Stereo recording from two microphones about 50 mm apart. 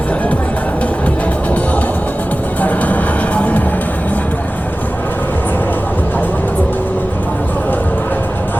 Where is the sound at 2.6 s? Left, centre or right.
Left.